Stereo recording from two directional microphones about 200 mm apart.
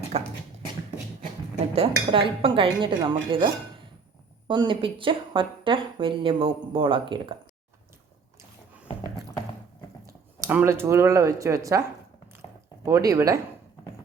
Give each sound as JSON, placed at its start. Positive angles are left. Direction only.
{"t": 0.1, "sound": "a sound", "side_deg": -30}
{"t": 1.7, "sound": "speech", "side_deg": -30}
{"t": 10.4, "sound": "speech", "side_deg": -10}
{"t": 12.8, "sound": "speech", "side_deg": -15}